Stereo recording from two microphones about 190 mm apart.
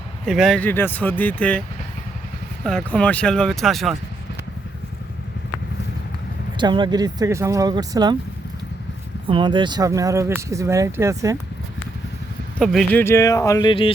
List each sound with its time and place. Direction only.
0.3 s speech: centre (ahead or behind)
2.6 s speech: 5° left (ahead or behind)
6.6 s speech: 25° right (ahead or behind)
9.2 s speech: 25° right (ahead or behind)
12.5 s speech: centre (ahead or behind)
13.0 s speech: 15° left (ahead or behind)